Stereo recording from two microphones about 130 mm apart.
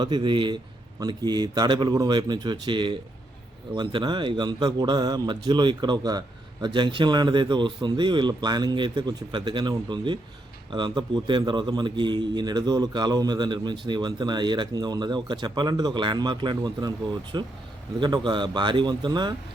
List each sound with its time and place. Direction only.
0.0 s a man's voice: 35° right (ahead or behind)